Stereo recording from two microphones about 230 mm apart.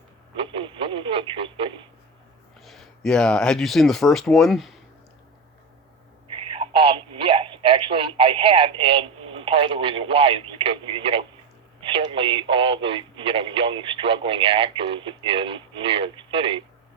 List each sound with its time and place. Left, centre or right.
0.3 s radio: right
2.6 s speech: centre
6.3 s telephone: right
11.8 s radio: right